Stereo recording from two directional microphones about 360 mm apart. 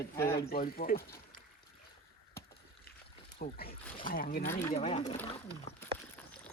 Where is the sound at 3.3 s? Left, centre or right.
Left.